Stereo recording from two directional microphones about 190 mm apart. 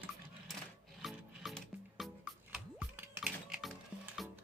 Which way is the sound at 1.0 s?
Centre (ahead or behind).